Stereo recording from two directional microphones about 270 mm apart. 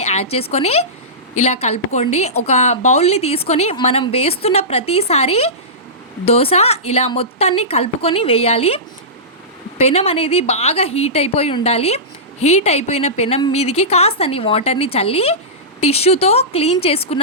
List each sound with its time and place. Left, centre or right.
0.0 s a woman's voice: left